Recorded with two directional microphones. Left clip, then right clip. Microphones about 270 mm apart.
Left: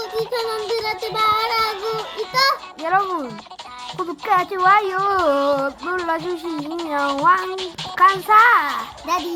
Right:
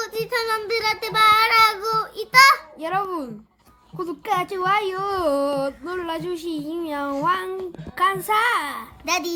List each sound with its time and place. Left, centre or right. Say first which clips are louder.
0.3 s child singing: even; centre
2.8 s speech: left 9 dB; centre
4.3 s speech: left 6 dB; centre